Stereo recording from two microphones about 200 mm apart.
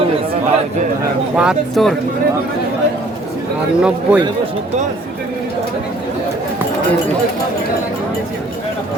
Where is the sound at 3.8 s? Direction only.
5° right (ahead or behind).